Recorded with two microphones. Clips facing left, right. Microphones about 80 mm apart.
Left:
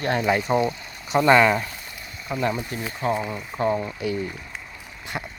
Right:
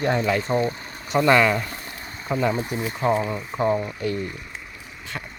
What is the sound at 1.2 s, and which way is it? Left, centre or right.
Speech, centre.